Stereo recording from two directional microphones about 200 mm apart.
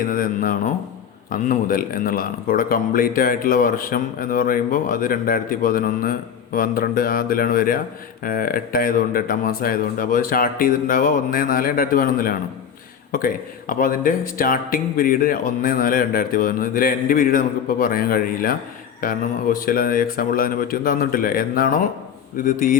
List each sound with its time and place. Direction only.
0.0 s speech: 45° left (ahead or behind)